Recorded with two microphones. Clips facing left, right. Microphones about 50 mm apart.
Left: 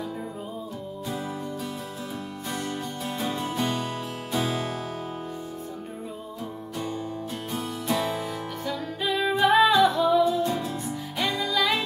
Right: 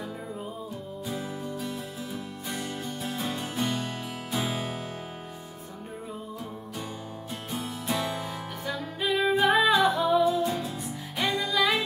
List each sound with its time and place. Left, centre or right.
1.0 s music: centre
7.5 s music: centre
8.6 s music: centre
9.5 s music: centre
9.8 s music: centre